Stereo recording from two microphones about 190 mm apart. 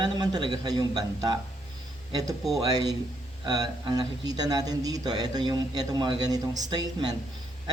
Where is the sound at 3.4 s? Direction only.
20° right (ahead or behind).